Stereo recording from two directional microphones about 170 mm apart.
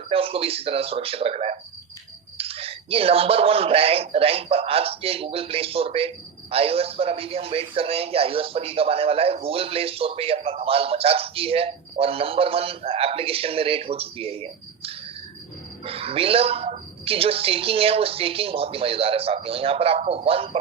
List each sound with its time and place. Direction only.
0.1 s speech: 35° right (ahead or behind)